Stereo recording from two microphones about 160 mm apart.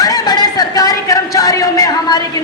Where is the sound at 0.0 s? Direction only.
25° left (ahead or behind).